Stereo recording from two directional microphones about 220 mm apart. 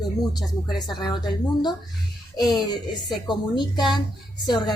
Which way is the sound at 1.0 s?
20° left (ahead or behind).